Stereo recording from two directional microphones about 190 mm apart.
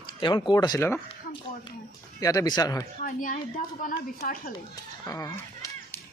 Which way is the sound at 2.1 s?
20° left (ahead or behind).